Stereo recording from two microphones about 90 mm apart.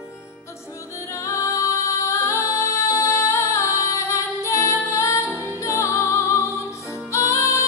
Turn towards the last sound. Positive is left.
turn(degrees=35)  # may be behind; listen again after turning